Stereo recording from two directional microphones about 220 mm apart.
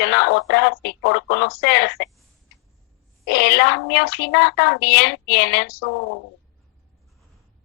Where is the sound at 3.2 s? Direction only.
50° left (ahead or behind).